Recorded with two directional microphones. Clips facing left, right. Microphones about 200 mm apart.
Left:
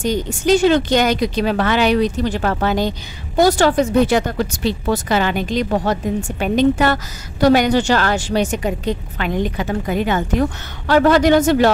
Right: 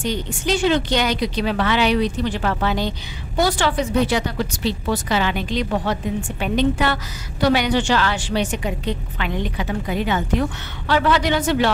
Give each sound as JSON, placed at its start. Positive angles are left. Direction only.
{"t": 0.0, "sound": "a woman's voice", "side_deg": 45}